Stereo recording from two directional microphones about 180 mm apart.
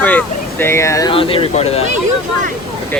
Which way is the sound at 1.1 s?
30° left (ahead or behind).